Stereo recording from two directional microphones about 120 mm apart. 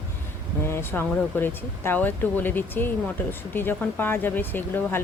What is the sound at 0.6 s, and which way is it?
Speech, 20° left (ahead or behind).